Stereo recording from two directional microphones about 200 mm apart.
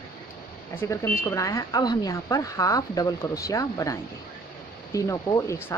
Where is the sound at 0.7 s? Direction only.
10° left (ahead or behind).